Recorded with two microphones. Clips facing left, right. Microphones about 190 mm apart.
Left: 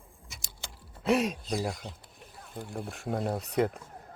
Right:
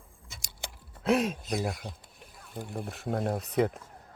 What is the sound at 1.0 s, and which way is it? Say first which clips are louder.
Speech: even; centre (ahead or behind).